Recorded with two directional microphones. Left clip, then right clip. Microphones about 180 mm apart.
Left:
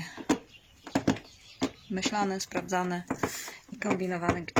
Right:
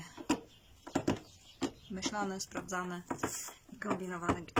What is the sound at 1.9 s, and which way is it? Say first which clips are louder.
Speech: left 8 dB; 5° left (ahead or behind).